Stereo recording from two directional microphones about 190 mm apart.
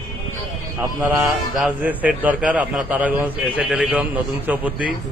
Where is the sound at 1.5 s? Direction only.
5° right (ahead or behind).